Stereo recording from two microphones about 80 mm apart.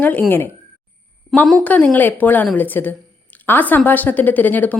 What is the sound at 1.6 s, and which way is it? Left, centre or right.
A woman's voice, centre.